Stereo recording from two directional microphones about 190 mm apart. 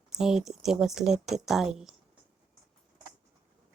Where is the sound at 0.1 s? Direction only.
Centre (ahead or behind).